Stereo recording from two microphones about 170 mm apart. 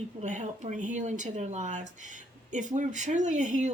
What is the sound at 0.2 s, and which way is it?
Speech, 45° right (ahead or behind).